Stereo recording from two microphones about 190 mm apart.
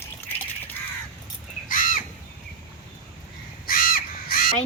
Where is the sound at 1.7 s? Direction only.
45° left (ahead or behind).